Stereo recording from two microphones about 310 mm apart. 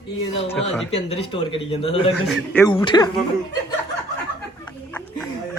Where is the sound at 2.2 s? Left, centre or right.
Centre.